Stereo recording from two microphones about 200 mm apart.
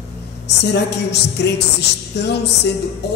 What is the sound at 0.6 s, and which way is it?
Speech, 60° left (ahead or behind).